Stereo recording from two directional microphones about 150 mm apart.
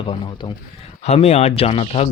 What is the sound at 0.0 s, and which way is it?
Speech, 35° left (ahead or behind).